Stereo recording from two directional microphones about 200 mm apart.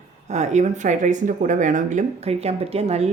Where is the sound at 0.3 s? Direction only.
35° right (ahead or behind).